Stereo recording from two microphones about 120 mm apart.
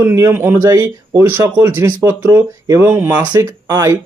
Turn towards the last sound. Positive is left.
turn(degrees=-30)  # may be behind; listen again after turning